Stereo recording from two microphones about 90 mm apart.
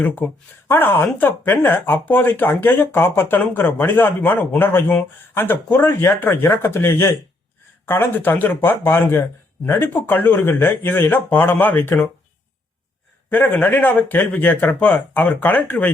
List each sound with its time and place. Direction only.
0.7 s speech: 25° left (ahead or behind)
13.3 s speech: 20° left (ahead or behind)